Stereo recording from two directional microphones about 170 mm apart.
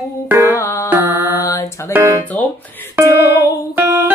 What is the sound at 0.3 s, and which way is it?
Music, 15° right (ahead or behind).